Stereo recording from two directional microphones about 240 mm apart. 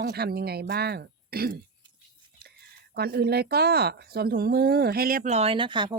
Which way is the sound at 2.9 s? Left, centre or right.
Right.